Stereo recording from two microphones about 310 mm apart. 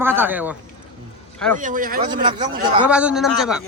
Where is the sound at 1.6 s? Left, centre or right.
Right.